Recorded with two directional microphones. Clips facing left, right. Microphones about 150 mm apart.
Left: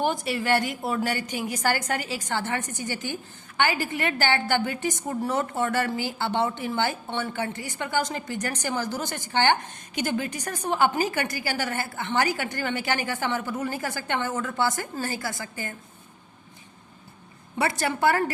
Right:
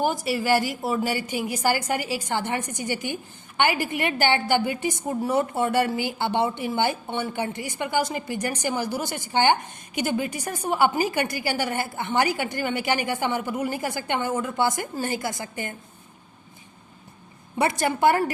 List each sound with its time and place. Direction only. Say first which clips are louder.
0.0 s speech: right 2 dB; 5° right (ahead or behind); by 15.7 s 20° right (ahead or behind)
17.6 s speech: right 3 dB; 15° right (ahead or behind)